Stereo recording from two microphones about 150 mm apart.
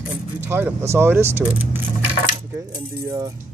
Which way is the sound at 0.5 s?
15° right (ahead or behind).